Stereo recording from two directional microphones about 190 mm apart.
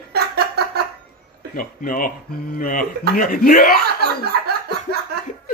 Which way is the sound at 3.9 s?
55° right (ahead or behind).